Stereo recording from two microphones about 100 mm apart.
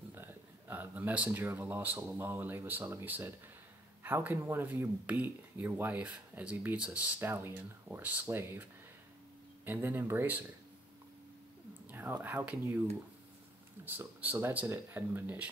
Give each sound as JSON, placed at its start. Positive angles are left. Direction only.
{"t": 0.1, "sound": "speech", "side_deg": -20}
{"t": 7.2, "sound": "speech", "side_deg": -25}
{"t": 9.7, "sound": "speech", "side_deg": -20}
{"t": 11.9, "sound": "speech", "side_deg": -20}
{"t": 13.8, "sound": "speech", "side_deg": -15}